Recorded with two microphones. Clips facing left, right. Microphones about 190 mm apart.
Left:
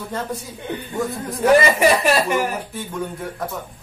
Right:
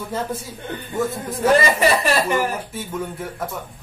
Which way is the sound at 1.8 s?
15° left (ahead or behind).